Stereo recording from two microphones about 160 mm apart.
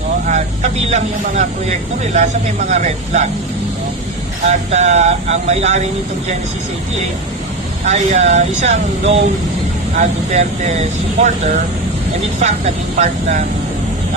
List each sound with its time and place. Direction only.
0.3 s speech: 50° right (ahead or behind)
4.4 s speech: 45° right (ahead or behind)
7.9 s speech: 45° right (ahead or behind)
12.4 s speech: 45° right (ahead or behind)